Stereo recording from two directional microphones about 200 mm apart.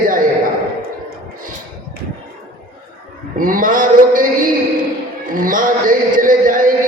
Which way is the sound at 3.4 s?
45° right (ahead or behind).